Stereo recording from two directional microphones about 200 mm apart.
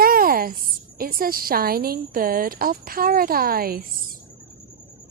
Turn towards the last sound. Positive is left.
turn(degrees=-50)  # may be behind; listen again after turning